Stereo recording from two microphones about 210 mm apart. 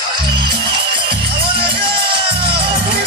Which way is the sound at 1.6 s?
25° right (ahead or behind).